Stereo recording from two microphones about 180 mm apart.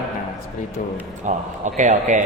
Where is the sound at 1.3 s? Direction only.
40° right (ahead or behind).